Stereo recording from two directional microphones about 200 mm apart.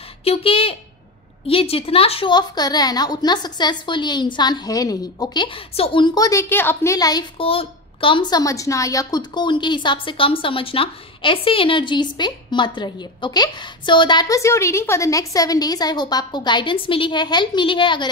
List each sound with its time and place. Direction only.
0.2 s a woman's voice: 30° left (ahead or behind)